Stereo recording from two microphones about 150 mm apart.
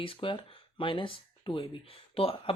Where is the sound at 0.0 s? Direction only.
35° left (ahead or behind).